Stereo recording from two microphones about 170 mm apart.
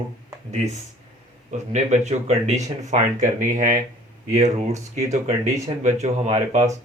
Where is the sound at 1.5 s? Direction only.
45° right (ahead or behind).